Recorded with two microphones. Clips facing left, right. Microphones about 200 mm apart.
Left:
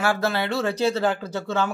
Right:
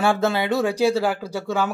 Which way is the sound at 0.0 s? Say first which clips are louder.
Right 3 dB; 25° right (ahead or behind).